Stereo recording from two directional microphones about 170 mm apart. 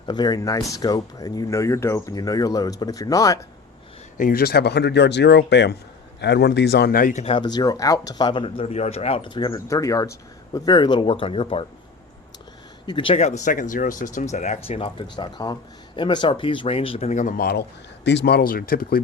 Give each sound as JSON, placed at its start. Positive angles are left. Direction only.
{"t": 0.0, "sound": "speech", "side_deg": 25}
{"t": 4.2, "sound": "speech", "side_deg": 60}
{"t": 7.3, "sound": "speech", "side_deg": 25}
{"t": 12.8, "sound": "speech", "side_deg": 30}
{"t": 15.1, "sound": "speech", "side_deg": 25}